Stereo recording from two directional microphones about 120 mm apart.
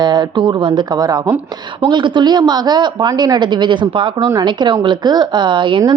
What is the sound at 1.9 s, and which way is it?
A woman's voice, 40° right (ahead or behind).